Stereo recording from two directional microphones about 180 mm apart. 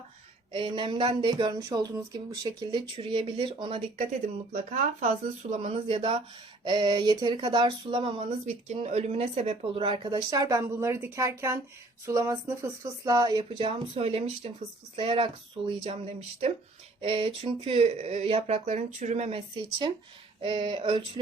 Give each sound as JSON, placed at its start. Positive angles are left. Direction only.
{"t": 0.5, "sound": "speech", "side_deg": -25}
{"t": 4.1, "sound": "speech", "side_deg": -45}
{"t": 20.4, "sound": "speech", "side_deg": -30}